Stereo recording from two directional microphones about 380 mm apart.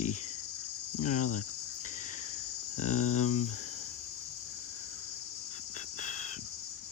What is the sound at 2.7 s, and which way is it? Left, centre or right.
Speech, centre.